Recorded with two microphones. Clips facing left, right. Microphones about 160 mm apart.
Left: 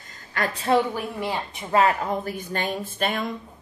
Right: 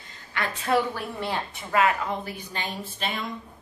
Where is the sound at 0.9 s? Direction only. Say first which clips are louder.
Left 2 dB; 15° left (ahead or behind).